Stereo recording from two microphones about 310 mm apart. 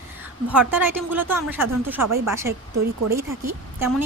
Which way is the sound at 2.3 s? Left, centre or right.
Centre.